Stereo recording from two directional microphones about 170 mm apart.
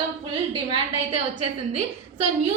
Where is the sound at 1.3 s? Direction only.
40° right (ahead or behind).